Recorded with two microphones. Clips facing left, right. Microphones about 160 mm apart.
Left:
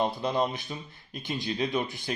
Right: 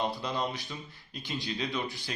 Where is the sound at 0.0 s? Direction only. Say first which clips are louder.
Left 4 dB; 55° left (ahead or behind).